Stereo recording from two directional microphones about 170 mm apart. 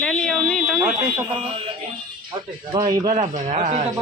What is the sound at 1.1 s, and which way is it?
Speech, 30° right (ahead or behind).